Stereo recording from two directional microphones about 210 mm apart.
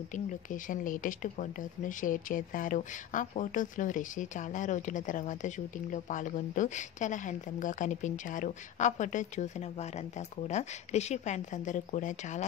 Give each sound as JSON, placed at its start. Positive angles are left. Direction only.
{"t": 0.1, "sound": "speech", "side_deg": 40}